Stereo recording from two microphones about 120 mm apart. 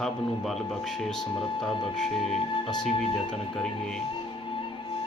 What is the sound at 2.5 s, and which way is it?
Speech, 35° left (ahead or behind).